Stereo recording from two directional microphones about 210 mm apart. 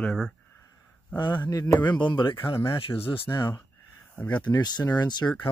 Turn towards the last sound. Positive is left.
turn(degrees=20)  # may be behind; listen again after turning